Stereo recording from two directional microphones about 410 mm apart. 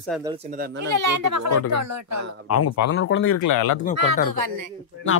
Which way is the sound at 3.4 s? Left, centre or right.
Left.